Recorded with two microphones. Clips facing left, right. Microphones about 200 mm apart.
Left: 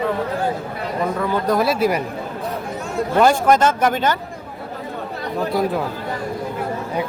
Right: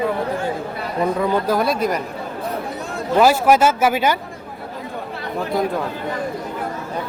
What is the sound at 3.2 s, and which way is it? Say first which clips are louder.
Speech: right 1 dB; 5° right (ahead or behind).